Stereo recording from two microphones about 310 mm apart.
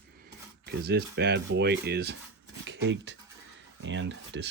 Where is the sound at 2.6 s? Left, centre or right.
Right.